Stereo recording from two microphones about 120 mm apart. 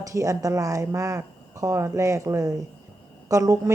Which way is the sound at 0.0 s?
25° right (ahead or behind).